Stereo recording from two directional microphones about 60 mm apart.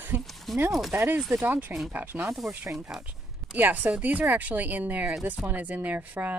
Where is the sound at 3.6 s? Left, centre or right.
Right.